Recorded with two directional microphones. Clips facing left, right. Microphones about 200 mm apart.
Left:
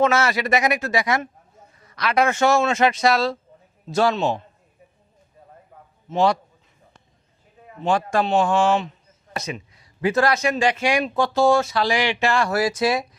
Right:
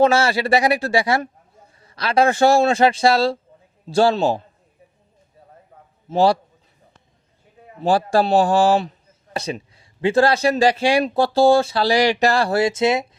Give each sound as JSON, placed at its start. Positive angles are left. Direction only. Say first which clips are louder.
{"t": 0.0, "sound": "a man's voice", "louder": "right 3 dB", "side_deg": -30}
{"t": 6.1, "sound": "a man's voice", "louder": "right 3 dB", "side_deg": -35}
{"t": 7.8, "sound": "a man's voice", "louder": "right 4 dB", "side_deg": -35}